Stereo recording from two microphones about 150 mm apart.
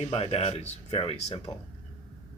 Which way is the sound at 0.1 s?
40° left (ahead or behind).